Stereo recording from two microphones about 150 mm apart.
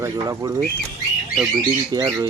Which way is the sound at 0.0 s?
25° right (ahead or behind).